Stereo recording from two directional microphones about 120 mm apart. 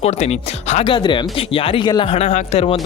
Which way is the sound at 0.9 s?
40° left (ahead or behind).